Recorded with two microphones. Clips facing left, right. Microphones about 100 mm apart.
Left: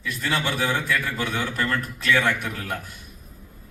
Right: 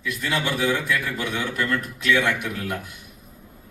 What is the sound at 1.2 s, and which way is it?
A man's voice, 35° left (ahead or behind).